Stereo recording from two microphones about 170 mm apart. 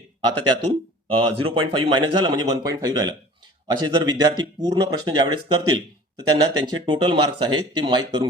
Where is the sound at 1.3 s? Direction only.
30° right (ahead or behind).